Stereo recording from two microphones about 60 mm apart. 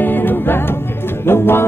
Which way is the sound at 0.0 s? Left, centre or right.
Left.